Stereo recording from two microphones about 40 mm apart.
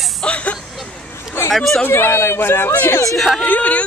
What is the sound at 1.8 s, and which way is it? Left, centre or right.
Speech, left.